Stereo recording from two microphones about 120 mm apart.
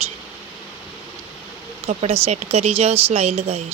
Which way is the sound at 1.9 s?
60° right (ahead or behind).